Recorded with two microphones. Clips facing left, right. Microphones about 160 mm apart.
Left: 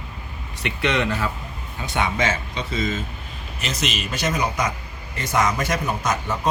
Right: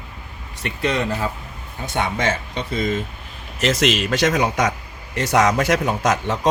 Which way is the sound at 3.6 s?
90° right.